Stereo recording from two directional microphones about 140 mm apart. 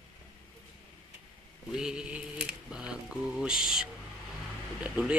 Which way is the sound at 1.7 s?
5° right (ahead or behind).